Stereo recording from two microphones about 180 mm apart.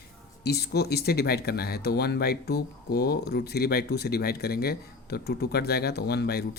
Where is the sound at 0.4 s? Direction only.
65° left (ahead or behind).